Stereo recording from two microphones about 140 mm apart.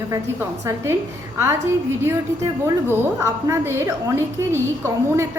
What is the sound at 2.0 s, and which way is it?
A woman's voice, 15° right (ahead or behind).